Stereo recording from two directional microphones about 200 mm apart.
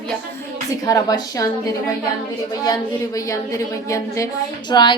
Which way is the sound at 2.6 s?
20° left (ahead or behind).